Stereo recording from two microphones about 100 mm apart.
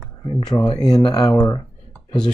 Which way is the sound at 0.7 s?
40° left (ahead or behind).